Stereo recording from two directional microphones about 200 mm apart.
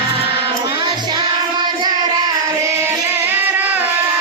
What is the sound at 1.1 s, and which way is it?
Child singing, 20° right (ahead or behind).